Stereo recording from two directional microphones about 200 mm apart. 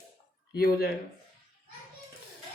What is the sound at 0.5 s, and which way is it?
Speech, 50° left (ahead or behind).